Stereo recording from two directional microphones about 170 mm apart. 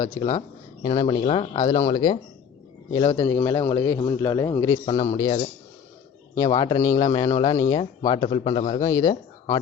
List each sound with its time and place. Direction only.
0.2 s speech: 20° left (ahead or behind)
4.9 s speech: 35° left (ahead or behind)
7.6 s speech: 25° left (ahead or behind)